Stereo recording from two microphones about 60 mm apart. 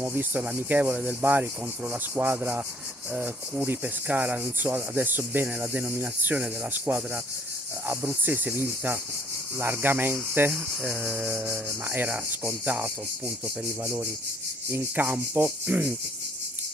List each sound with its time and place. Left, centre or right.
0.0 s cricket: right
1.2 s cricket: right
3.6 s cricket: right
5.7 s cricket: right
6.9 s cricket: right
11.1 s mantra: centre
11.3 s cricket: right
14.7 s cricket: right